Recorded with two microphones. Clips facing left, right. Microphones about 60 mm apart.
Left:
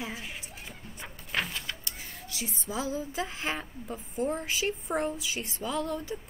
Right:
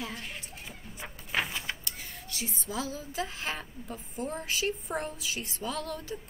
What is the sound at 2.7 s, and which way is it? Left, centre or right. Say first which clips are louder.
A woman's voice: left 4 dB; left.